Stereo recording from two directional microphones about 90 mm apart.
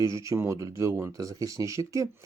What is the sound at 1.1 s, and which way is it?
Speech, 40° right (ahead or behind).